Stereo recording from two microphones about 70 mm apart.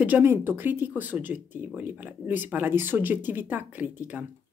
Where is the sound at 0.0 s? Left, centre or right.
Right.